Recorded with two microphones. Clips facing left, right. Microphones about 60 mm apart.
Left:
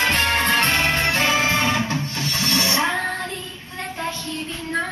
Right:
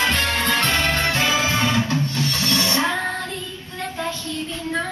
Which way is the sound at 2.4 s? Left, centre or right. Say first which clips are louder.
Left 2 dB; left.